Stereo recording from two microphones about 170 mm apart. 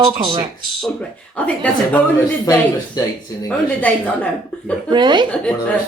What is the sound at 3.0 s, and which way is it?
Speech, 20° left (ahead or behind).